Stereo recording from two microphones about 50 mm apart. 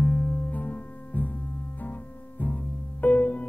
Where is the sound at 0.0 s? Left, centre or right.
Left.